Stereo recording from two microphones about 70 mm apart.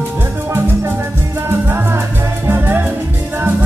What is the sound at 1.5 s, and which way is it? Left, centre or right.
Music, right.